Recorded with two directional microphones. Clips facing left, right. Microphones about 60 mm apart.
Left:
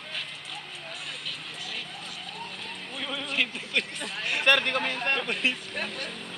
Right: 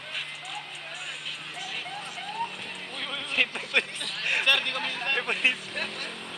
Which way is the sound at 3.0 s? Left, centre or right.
Centre.